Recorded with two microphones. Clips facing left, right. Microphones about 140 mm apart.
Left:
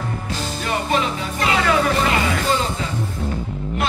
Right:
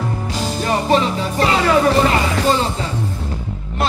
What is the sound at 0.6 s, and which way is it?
Music, 35° right (ahead or behind).